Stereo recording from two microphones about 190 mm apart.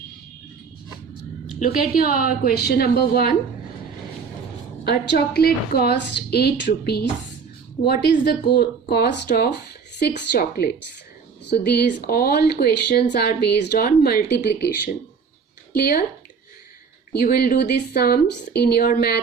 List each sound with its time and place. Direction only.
1.5 s a woman's voice: 45° left (ahead or behind)
4.9 s speech: 60° left (ahead or behind)
15.7 s speech: 55° left (ahead or behind)
17.1 s speech: 55° left (ahead or behind)